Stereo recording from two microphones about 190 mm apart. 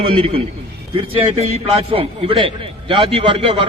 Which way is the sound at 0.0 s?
30° right (ahead or behind).